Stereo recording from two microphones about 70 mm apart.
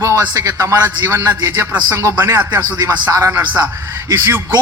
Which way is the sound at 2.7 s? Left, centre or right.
Right.